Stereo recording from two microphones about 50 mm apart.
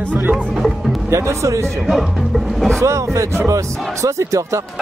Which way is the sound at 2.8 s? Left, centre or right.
Right.